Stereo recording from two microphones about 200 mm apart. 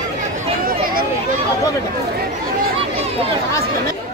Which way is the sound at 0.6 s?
45° right (ahead or behind).